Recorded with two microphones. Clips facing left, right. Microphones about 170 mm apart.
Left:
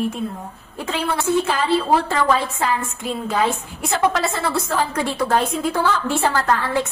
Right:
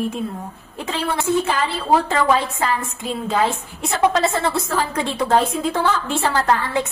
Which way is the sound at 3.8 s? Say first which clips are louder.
Right 2 dB; 20° right (ahead or behind).